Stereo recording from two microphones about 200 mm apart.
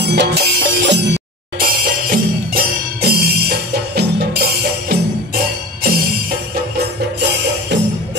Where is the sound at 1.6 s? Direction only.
50° right (ahead or behind).